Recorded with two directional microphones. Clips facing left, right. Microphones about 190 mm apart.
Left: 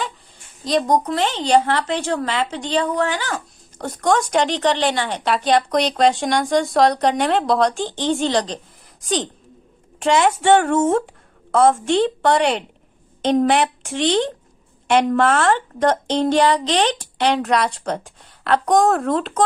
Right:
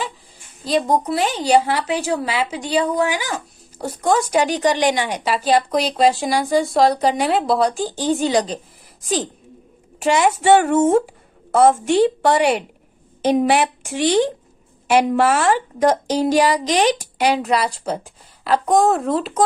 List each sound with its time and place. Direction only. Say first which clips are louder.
0.6 s speech: even; 5° right (ahead or behind)